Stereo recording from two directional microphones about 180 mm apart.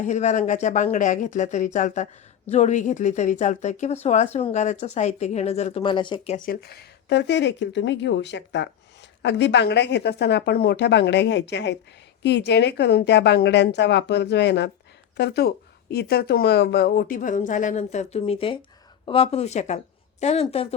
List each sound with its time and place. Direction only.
0.0 s speech: 40° left (ahead or behind)
6.3 s a woman's voice: 50° left (ahead or behind); by 20.7 s 35° left (ahead or behind)